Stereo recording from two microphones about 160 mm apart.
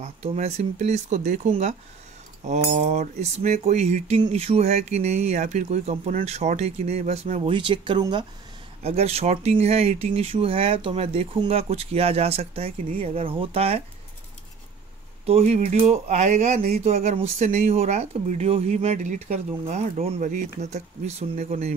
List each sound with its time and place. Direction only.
0.0 s speech: 40° right (ahead or behind)
8.8 s speech: 40° right (ahead or behind)
15.2 s speech: 40° right (ahead or behind)